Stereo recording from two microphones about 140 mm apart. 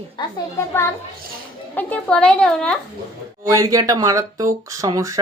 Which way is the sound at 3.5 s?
25° right (ahead or behind).